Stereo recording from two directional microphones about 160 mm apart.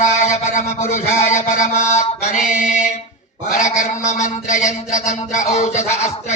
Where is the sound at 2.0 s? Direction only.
45° left (ahead or behind).